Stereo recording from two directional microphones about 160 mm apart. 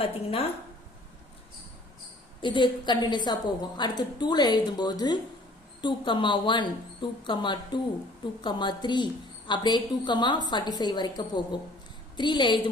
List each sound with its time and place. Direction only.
0.0 s a woman's voice: 35° left (ahead or behind)
2.4 s a woman's voice: 30° left (ahead or behind)